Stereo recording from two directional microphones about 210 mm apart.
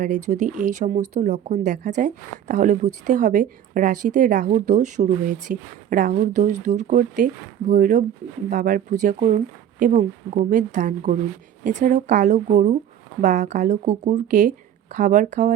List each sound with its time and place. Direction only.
0.3 s speech: 35° right (ahead or behind)